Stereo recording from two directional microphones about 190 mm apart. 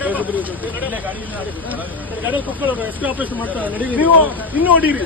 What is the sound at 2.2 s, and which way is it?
Speech, 10° right (ahead or behind).